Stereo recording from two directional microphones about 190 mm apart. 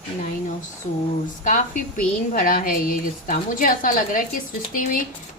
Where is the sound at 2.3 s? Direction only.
45° left (ahead or behind).